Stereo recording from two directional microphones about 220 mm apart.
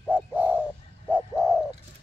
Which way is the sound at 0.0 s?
5° right (ahead or behind).